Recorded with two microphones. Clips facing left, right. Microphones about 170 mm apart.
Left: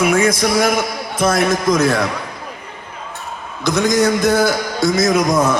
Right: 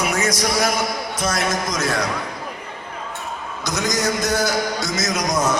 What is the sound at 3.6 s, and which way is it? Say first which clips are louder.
A man's voice: left 8 dB; 55° left (ahead or behind).